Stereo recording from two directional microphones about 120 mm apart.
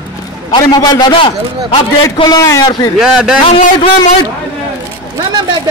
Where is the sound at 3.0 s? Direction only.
5° right (ahead or behind).